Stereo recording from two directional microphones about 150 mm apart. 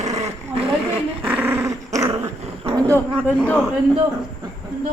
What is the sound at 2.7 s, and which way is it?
Speech, 20° right (ahead or behind).